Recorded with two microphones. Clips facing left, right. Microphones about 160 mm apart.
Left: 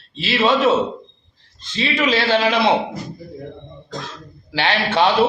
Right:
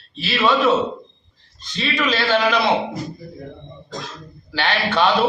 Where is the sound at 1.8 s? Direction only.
25° left (ahead or behind).